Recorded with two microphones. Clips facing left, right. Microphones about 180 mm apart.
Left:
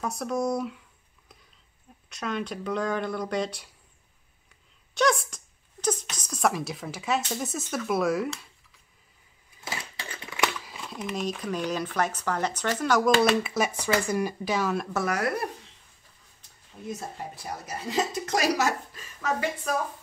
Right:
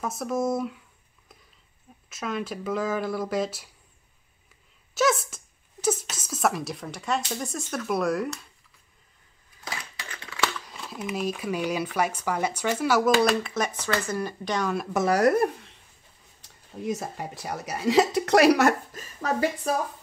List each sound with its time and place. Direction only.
0.0 s speech: centre (ahead or behind)
2.0 s speech: centre (ahead or behind)
4.9 s speech: 5° right (ahead or behind)
9.7 s a sound: 25° left (ahead or behind)
10.6 s speech: centre (ahead or behind)
15.0 s speech: 40° right (ahead or behind)
16.3 s speech: 80° right; by 18.8 s 60° right (ahead or behind)
18.9 s speech: 35° right (ahead or behind)